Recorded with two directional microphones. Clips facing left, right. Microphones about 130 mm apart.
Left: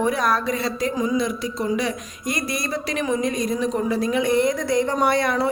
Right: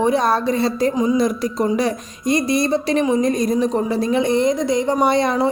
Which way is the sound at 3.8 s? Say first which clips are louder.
Right 3 dB; 30° right (ahead or behind).